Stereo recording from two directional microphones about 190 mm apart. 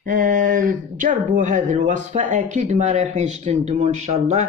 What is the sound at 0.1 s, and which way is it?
Speech, 45° right (ahead or behind).